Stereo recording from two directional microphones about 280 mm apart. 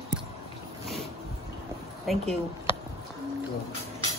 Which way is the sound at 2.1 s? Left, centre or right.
Centre.